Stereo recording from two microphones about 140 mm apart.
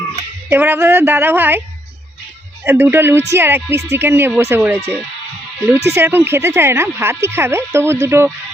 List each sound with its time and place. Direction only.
0.5 s speech: 15° right (ahead or behind)
2.6 s speech: 15° right (ahead or behind)